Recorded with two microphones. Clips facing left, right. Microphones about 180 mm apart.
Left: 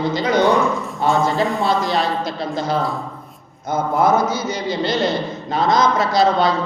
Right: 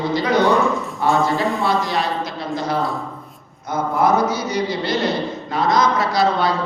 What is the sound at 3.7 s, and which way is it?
Speech, 25° left (ahead or behind).